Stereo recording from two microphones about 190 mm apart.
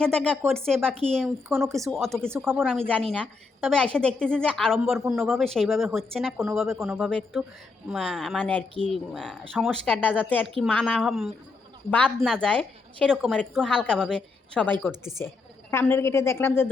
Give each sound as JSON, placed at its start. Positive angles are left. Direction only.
{"t": 0.0, "sound": "a woman's voice", "side_deg": 5}
{"t": 1.5, "sound": "speech", "side_deg": -15}
{"t": 2.0, "sound": "a woman's voice", "side_deg": 0}
{"t": 2.3, "sound": "speech", "side_deg": -10}
{"t": 2.6, "sound": "a woman's voice", "side_deg": 5}
{"t": 15.7, "sound": "a woman's voice", "side_deg": 10}